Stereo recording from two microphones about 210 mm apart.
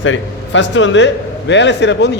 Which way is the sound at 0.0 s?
65° left (ahead or behind).